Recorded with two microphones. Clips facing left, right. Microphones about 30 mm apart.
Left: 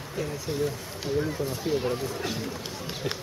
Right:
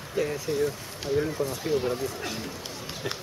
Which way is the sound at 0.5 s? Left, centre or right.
Centre.